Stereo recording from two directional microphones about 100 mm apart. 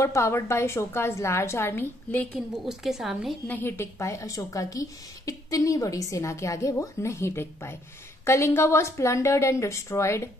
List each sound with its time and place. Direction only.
0.0 s a woman's voice: 30° left (ahead or behind)
2.6 s a woman's voice: 5° right (ahead or behind)
3.4 s a woman's voice: 20° left (ahead or behind)